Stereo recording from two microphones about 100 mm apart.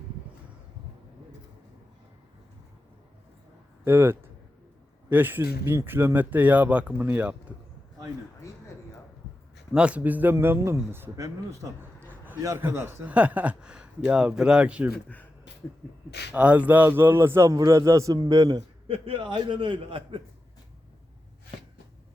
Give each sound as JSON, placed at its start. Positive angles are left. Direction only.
{"t": 3.8, "sound": "a man's voice", "side_deg": -20}
{"t": 9.7, "sound": "a man's voice", "side_deg": -10}
{"t": 11.8, "sound": "a sound", "side_deg": -20}
{"t": 12.4, "sound": "speech", "side_deg": -30}
{"t": 16.3, "sound": "a man's voice", "side_deg": -15}
{"t": 18.9, "sound": "a man's voice", "side_deg": -75}